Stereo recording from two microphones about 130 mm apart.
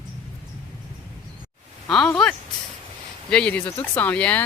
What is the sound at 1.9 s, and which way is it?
Speech, 5° left (ahead or behind).